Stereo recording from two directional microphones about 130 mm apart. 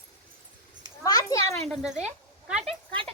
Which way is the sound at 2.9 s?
40° right (ahead or behind).